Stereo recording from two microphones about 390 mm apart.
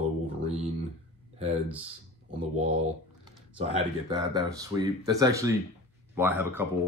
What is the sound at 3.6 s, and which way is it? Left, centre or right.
Speech, centre.